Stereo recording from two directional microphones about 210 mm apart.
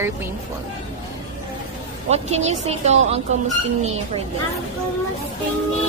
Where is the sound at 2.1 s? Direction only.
30° right (ahead or behind).